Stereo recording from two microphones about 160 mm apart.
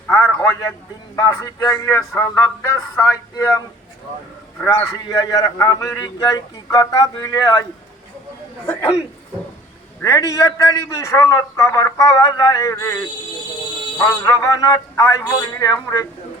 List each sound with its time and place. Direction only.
0.1 s a sound: 10° left (ahead or behind)
1.1 s speech: 15° left (ahead or behind)
4.6 s speech: 10° left (ahead or behind)
5.1 s a man's voice: 25° left (ahead or behind)
8.6 s speech: 15° left (ahead or behind)
10.0 s a man's voice: 20° left (ahead or behind)
14.3 s a man's voice: 20° left (ahead or behind)